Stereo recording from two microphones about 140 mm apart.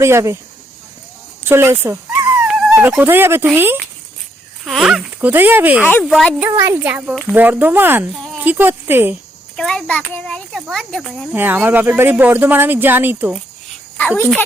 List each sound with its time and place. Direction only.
0.0 s speech: 20° right (ahead or behind)
1.5 s speech: 15° right (ahead or behind)
2.4 s dog: 5° right (ahead or behind)
3.0 s speech: 15° right (ahead or behind)
4.6 s speech: 5° right (ahead or behind)
5.9 s a child's voice: 5° left (ahead or behind)
6.4 s speech: 15° right (ahead or behind)
9.6 s a child's voice: 5° left (ahead or behind)
11.3 s speech: 15° right (ahead or behind)